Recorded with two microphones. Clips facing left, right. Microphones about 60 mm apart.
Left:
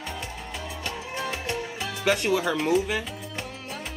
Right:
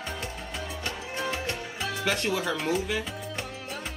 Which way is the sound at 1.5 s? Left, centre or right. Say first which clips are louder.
Left 2 dB; right.